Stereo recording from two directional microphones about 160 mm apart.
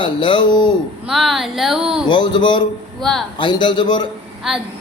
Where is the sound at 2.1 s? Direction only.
30° left (ahead or behind).